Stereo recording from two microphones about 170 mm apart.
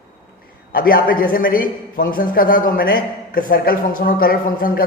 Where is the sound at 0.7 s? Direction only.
55° left (ahead or behind).